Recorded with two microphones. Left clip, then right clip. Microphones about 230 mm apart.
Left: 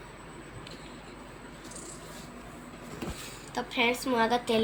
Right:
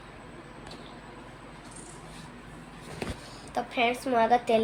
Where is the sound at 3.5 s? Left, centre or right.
Centre.